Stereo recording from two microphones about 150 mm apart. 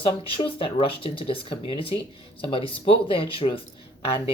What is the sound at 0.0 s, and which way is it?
Speech, 35° left (ahead or behind).